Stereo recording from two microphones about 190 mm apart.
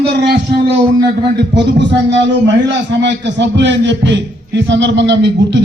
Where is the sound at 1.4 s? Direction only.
65° right (ahead or behind).